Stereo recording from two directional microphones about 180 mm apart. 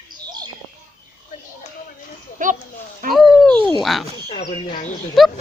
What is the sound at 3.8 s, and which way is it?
Speech, centre (ahead or behind).